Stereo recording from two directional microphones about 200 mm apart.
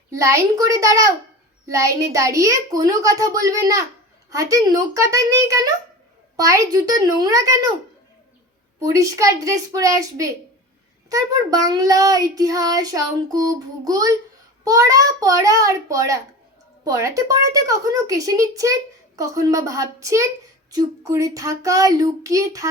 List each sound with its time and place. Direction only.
0.1 s a woman's voice: 15° right (ahead or behind)
8.8 s a woman's voice: 15° right (ahead or behind)